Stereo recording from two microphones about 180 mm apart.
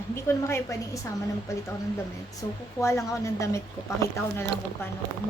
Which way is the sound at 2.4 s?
20° left (ahead or behind).